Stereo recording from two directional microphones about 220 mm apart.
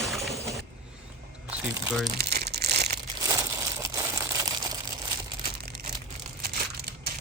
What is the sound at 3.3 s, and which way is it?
Crumpling, 15° right (ahead or behind).